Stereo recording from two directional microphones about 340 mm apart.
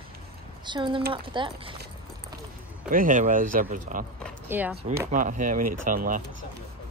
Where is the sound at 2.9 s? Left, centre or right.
Right.